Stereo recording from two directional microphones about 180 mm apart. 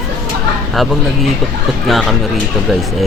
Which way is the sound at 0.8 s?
Centre (ahead or behind).